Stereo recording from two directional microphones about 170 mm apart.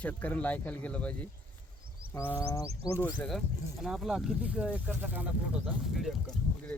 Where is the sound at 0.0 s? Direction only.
10° left (ahead or behind).